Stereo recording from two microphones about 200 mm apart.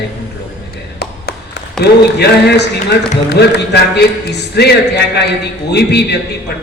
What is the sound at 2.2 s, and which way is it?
A man's voice, 55° left (ahead or behind).